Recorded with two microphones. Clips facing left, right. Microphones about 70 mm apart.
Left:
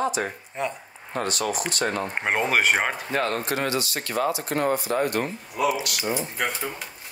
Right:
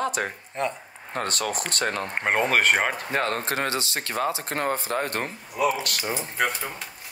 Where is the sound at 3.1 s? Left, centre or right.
Right.